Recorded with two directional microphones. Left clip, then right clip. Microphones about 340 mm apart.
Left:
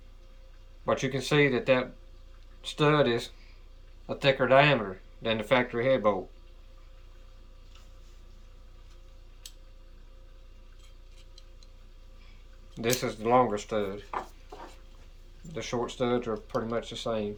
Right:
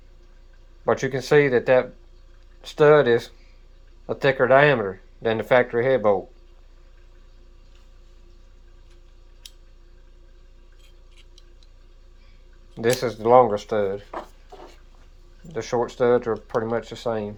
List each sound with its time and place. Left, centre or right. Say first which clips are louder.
0.9 s speech: right 7 dB; centre
12.8 s speech: right 7 dB; centre
15.5 s speech: right 8 dB; centre